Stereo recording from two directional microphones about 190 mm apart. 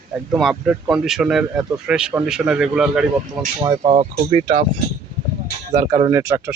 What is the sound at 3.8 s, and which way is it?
Speech, 30° right (ahead or behind).